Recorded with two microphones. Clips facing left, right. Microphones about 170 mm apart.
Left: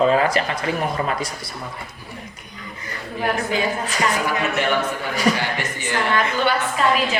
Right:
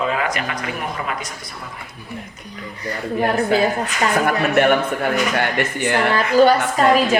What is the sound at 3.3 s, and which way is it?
Speech, 35° right (ahead or behind).